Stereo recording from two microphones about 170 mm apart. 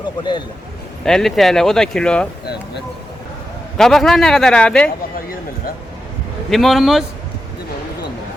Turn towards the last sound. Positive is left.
turn(degrees=0)  # may be behind; listen again after turning